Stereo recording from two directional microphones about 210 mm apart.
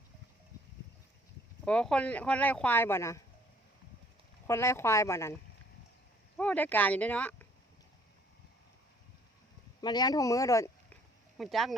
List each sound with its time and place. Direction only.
1.6 s speech: 5° left (ahead or behind)
4.4 s speech: 15° left (ahead or behind)
6.3 s speech: 5° left (ahead or behind)
9.8 s speech: 20° left (ahead or behind)
11.3 s speech: centre (ahead or behind)